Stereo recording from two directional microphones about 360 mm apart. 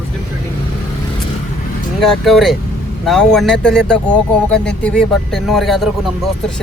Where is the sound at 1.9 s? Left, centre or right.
Centre.